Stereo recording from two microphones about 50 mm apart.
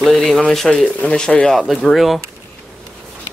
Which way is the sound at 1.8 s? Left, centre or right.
Centre.